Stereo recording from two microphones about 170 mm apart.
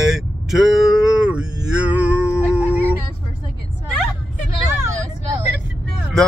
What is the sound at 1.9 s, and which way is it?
Music, 5° right (ahead or behind).